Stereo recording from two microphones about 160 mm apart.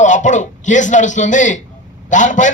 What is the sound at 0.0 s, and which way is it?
A man's voice, 50° left (ahead or behind).